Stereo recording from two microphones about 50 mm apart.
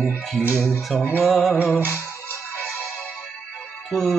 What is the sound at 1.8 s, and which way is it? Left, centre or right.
Music, left.